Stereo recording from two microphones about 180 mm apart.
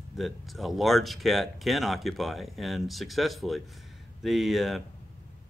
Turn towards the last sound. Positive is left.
turn(degrees=0)  # may be behind; listen again after turning